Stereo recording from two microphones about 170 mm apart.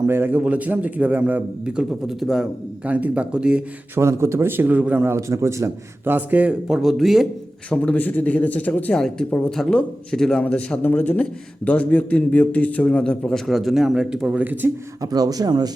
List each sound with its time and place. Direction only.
0.0 s a man's voice: 15° right (ahead or behind)
15.0 s speech: 20° right (ahead or behind)